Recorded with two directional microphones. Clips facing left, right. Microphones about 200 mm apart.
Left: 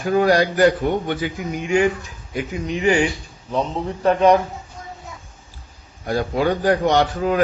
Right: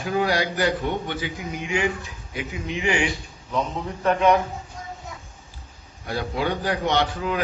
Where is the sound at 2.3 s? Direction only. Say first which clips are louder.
Left 5 dB; 45° left (ahead or behind).